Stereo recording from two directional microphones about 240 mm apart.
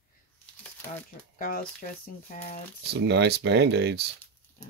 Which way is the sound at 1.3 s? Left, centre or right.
Left.